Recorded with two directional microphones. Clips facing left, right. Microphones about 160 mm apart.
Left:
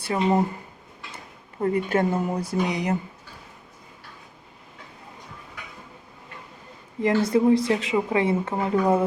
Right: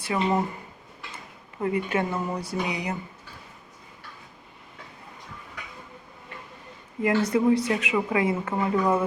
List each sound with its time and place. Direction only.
0.0 s a woman's voice: 30° left (ahead or behind)
1.6 s a woman's voice: 40° left (ahead or behind)
7.0 s a woman's voice: 30° left (ahead or behind)